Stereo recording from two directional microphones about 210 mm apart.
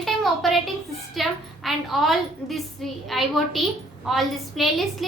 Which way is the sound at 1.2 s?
Centre (ahead or behind).